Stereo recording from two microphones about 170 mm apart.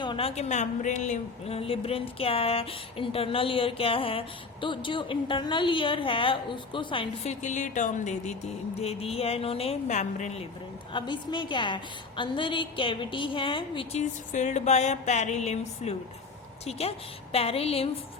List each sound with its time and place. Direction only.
0.0 s a woman's voice: 30° left (ahead or behind)
7.4 s music: 45° left (ahead or behind)
10.9 s a woman's voice: 25° left (ahead or behind)
14.0 s a woman's voice: 45° left (ahead or behind)